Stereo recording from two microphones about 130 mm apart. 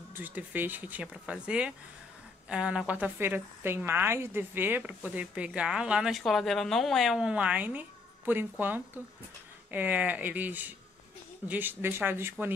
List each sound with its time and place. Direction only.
0.1 s a woman's voice: 15° right (ahead or behind)